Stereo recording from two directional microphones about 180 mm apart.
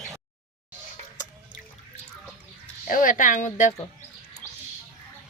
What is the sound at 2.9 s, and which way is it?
Speech, 50° left (ahead or behind).